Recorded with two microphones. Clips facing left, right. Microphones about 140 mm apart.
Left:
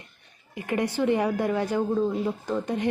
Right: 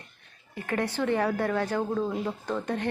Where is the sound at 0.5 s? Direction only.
15° left (ahead or behind).